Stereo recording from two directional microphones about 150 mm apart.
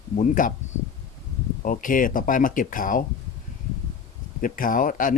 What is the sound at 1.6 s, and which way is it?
Speech, 65° left (ahead or behind).